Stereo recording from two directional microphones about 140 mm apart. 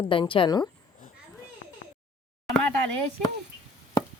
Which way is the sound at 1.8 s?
65° left (ahead or behind).